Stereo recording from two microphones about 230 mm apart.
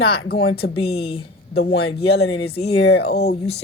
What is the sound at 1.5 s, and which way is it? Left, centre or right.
A woman's voice, left.